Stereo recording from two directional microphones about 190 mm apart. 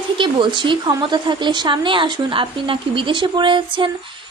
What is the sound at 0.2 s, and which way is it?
Speech, 25° right (ahead or behind).